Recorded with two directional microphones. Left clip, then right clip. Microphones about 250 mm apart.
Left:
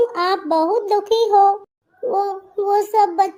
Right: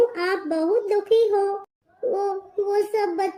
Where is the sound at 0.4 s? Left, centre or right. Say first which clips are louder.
Left 5 dB; centre.